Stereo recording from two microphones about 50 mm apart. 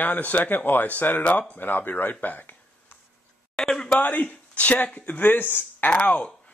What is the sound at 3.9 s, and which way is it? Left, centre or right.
Speech, left.